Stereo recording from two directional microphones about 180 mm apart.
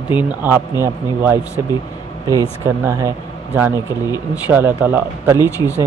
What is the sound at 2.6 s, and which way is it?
Speech, 15° right (ahead or behind).